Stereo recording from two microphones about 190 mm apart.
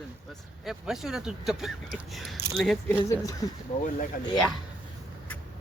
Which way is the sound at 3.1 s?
15° left (ahead or behind).